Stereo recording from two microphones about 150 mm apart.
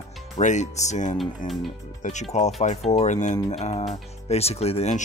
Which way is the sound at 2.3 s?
50° left (ahead or behind).